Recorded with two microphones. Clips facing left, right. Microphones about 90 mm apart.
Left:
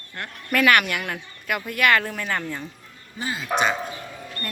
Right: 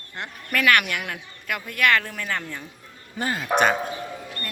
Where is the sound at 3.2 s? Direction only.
50° right (ahead or behind).